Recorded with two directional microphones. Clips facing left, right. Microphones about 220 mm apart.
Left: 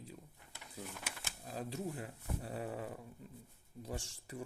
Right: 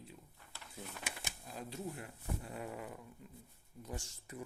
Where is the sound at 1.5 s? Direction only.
35° left (ahead or behind).